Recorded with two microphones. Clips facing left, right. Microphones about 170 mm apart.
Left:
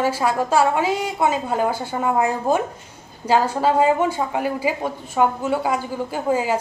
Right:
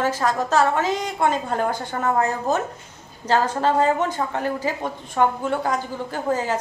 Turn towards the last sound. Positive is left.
turn(degrees=10)  # may be behind; listen again after turning